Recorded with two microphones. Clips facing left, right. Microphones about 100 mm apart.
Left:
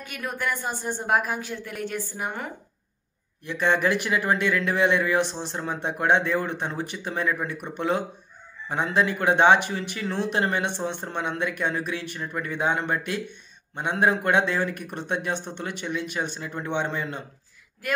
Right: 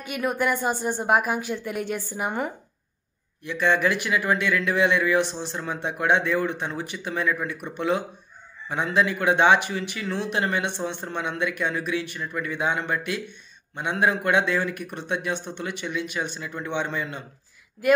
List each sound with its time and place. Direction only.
0.0 s a woman's voice: 10° right (ahead or behind)
3.4 s a man's voice: 35° left (ahead or behind)